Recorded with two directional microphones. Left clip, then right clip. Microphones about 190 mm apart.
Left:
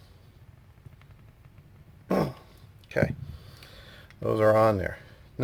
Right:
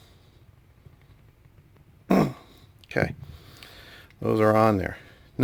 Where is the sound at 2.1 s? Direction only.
45° right (ahead or behind).